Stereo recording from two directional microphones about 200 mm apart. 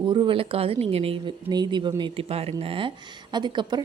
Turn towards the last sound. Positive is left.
turn(degrees=-25)  # may be behind; listen again after turning